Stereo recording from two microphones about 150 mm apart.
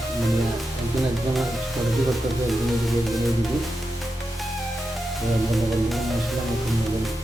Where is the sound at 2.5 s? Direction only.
Centre (ahead or behind).